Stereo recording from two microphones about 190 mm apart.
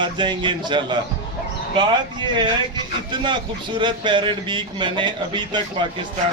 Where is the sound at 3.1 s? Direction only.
25° right (ahead or behind).